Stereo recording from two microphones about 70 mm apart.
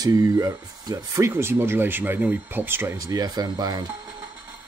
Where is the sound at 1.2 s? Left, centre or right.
Right.